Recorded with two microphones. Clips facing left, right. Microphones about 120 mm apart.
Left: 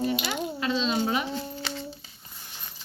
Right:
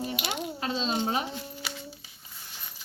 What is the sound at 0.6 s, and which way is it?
Speech, 45° right (ahead or behind).